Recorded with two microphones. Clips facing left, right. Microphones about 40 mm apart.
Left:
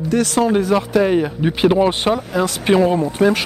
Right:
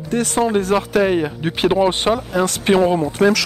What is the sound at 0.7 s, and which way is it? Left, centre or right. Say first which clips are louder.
Speech: left 1 dB; centre.